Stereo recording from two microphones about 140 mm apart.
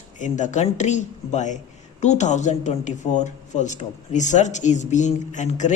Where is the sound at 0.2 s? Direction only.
60° left (ahead or behind).